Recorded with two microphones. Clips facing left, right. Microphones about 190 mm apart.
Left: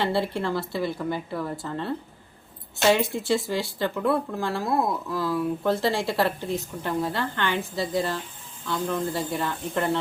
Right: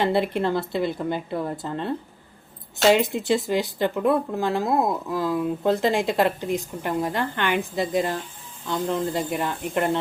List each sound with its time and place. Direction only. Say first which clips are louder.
0.0 s a woman's voice: right 3 dB; 20° right (ahead or behind)